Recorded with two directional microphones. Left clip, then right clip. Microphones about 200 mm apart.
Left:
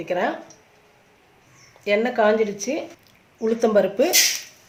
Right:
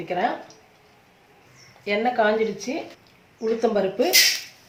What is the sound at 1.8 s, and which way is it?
Speech, 50° left (ahead or behind).